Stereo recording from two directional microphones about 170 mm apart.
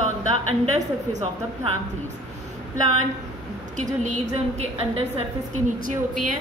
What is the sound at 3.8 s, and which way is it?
A woman's voice, 45° right (ahead or behind).